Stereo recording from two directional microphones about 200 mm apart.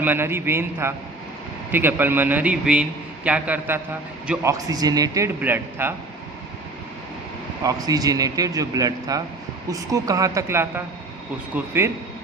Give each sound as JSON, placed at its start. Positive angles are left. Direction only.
{"t": 0.0, "sound": "a man's voice", "side_deg": -10}
{"t": 7.6, "sound": "a man's voice", "side_deg": -20}